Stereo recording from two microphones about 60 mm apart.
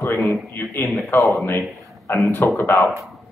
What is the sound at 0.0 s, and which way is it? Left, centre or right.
A man's voice, left.